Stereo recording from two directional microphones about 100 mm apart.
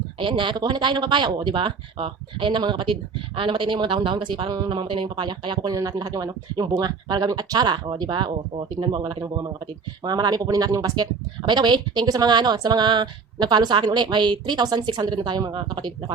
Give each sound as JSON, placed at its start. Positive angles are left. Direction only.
{"t": 0.2, "sound": "speech", "side_deg": -55}
{"t": 5.6, "sound": "speech", "side_deg": -40}
{"t": 9.2, "sound": "speech", "side_deg": -40}